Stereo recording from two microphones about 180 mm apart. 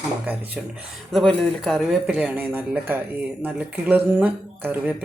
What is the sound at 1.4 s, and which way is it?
Speech, centre (ahead or behind).